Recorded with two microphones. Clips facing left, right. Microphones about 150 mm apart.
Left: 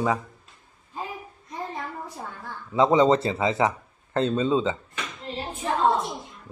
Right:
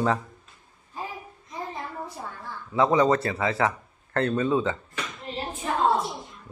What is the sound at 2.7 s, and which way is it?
A man's voice, 20° left (ahead or behind).